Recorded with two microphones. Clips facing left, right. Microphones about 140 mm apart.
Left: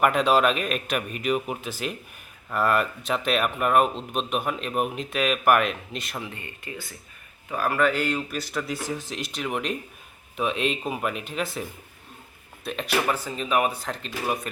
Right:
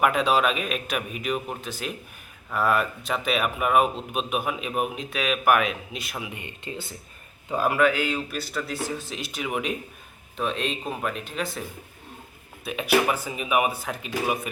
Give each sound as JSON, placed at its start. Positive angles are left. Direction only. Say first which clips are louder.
{"t": 0.0, "sound": "speech", "louder": "left 1 dB", "side_deg": 0}
{"t": 7.8, "sound": "speech", "louder": "left 1 dB", "side_deg": -5}
{"t": 12.6, "sound": "speech", "louder": "right 3 dB", "side_deg": -5}